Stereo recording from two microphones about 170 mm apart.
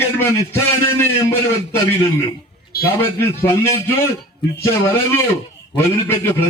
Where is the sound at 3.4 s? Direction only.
15° left (ahead or behind).